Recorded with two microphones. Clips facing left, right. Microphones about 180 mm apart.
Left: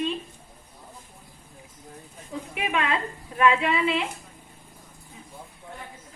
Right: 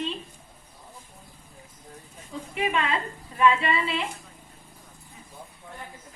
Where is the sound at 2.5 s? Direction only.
15° left (ahead or behind).